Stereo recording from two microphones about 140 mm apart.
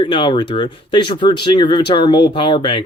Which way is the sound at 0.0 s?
35° left (ahead or behind).